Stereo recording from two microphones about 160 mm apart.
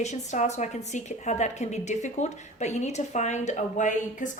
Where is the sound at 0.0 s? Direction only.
45° left (ahead or behind).